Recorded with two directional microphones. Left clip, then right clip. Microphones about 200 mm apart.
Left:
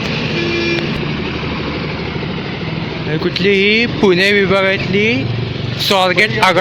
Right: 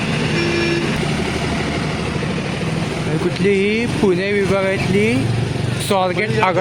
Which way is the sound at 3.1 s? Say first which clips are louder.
Left 4 dB; centre (ahead or behind).